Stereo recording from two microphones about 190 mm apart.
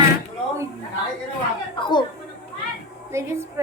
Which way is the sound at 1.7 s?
25° left (ahead or behind).